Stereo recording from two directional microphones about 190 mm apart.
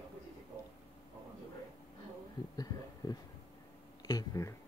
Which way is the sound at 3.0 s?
20° left (ahead or behind).